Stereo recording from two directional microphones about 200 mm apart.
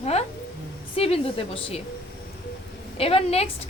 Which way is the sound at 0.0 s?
30° left (ahead or behind).